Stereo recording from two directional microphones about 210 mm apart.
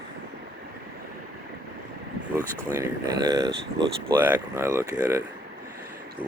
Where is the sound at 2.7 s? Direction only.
15° right (ahead or behind).